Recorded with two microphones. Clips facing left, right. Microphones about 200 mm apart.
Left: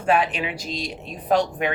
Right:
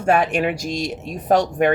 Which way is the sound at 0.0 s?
45° right (ahead or behind).